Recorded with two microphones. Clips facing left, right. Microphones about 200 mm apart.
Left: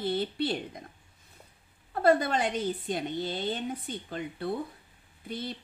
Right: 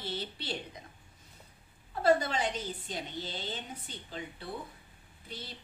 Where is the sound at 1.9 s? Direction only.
55° left (ahead or behind).